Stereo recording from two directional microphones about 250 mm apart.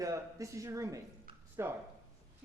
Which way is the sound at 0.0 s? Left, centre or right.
Centre.